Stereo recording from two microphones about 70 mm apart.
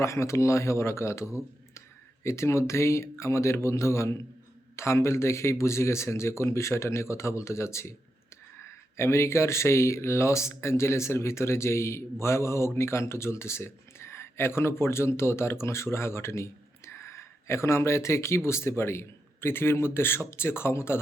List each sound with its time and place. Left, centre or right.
0.0 s speech: left